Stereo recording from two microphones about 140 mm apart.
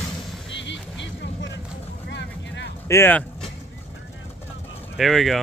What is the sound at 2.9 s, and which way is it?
Speech, 15° left (ahead or behind).